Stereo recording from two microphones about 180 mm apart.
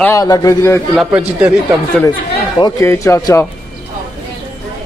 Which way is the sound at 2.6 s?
20° left (ahead or behind).